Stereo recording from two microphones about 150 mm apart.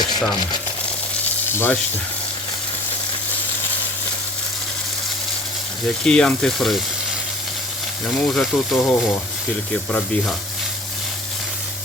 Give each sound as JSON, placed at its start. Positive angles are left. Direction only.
{"t": 0.2, "sound": "speech", "side_deg": 25}
{"t": 1.5, "sound": "speech", "side_deg": 15}
{"t": 6.1, "sound": "speech", "side_deg": 5}
{"t": 8.1, "sound": "speech", "side_deg": 5}